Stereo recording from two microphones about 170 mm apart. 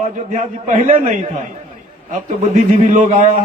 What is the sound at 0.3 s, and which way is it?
Speech, 45° right (ahead or behind).